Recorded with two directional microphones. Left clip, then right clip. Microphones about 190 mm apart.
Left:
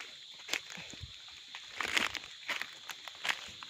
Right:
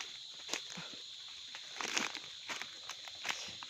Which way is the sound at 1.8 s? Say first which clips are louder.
Left 5 dB; 30° left (ahead or behind).